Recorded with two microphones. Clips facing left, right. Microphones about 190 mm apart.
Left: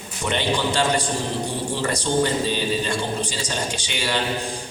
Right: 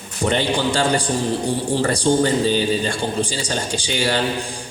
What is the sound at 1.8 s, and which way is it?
Speech, 30° right (ahead or behind).